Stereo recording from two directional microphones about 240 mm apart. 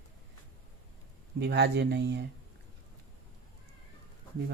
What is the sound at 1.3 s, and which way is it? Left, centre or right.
Speech, right.